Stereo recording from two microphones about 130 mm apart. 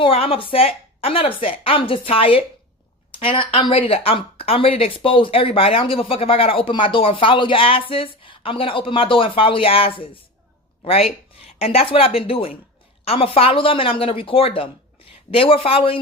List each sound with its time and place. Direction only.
0.0 s speech: 45° left (ahead or behind)